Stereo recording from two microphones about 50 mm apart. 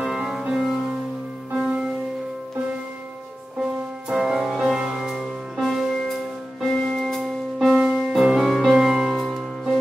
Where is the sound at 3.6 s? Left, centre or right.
Centre.